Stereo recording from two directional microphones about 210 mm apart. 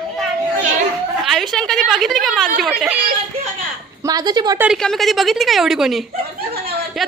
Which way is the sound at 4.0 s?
20° right (ahead or behind).